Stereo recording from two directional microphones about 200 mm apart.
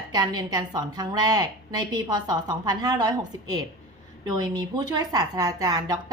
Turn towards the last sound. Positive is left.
turn(degrees=-20)  # may be behind; listen again after turning